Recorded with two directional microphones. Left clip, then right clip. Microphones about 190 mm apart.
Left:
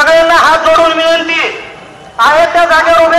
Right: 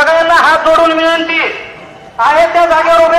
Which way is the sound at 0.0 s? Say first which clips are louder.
Left 2 dB; 60° left (ahead or behind).